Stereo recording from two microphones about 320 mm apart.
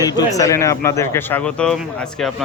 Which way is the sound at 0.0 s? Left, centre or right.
Centre.